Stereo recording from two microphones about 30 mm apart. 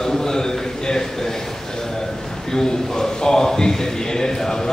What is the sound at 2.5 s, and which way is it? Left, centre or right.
A man's voice, centre.